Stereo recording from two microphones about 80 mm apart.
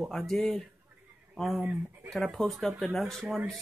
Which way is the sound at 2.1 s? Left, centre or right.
Centre.